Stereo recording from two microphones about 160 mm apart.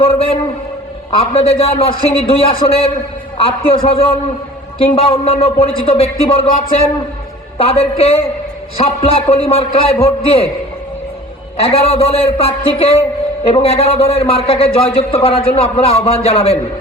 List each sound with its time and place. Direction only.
0.0 s a man's voice: 35° left (ahead or behind)
11.5 s a man's voice: 35° left (ahead or behind)